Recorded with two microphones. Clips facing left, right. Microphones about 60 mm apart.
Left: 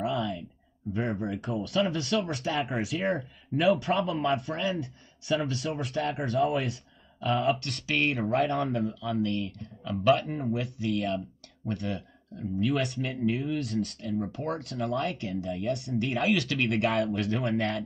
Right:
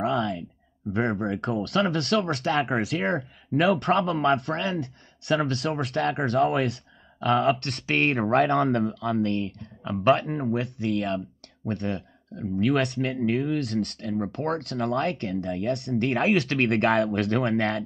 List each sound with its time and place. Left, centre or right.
0.0 s a sound: right
0.9 s speech: right
10.1 s speech: right